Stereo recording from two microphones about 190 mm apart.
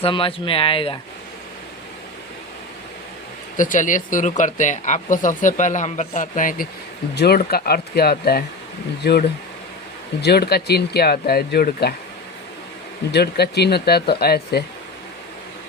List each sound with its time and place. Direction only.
0.0 s speech: 30° left (ahead or behind)
3.6 s speech: 45° left (ahead or behind)
13.1 s speech: 60° left (ahead or behind)